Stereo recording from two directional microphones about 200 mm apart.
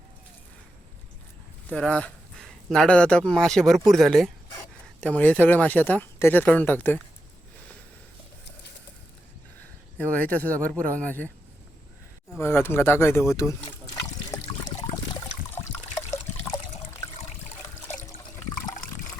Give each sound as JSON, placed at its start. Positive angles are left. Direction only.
{"t": 1.7, "sound": "speech", "side_deg": 5}
{"t": 10.0, "sound": "speech", "side_deg": 10}
{"t": 12.4, "sound": "speech", "side_deg": 10}
{"t": 14.3, "sound": "trickle", "side_deg": 20}